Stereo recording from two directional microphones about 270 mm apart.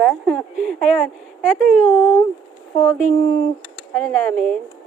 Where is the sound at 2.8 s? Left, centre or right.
Centre.